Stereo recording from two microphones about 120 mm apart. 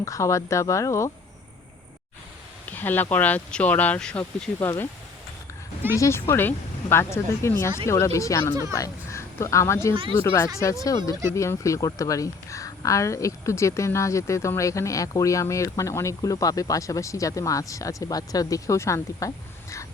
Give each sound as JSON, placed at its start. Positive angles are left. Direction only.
{"t": 0.0, "sound": "speech", "side_deg": 25}
{"t": 2.6, "sound": "speech", "side_deg": 15}
{"t": 6.0, "sound": "speech", "side_deg": 20}